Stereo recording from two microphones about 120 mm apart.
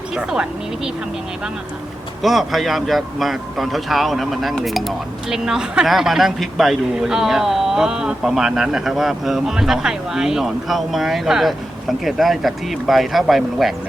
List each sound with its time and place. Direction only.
0.1 s speech: 5° right (ahead or behind)
2.2 s a man's voice: centre (ahead or behind)